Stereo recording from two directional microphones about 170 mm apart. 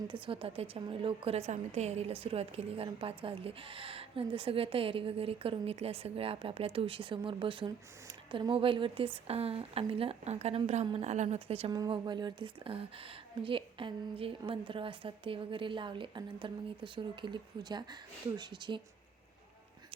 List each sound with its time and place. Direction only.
0.1 s a woman's voice: 30° right (ahead or behind)
11.7 s a woman's voice: 25° right (ahead or behind)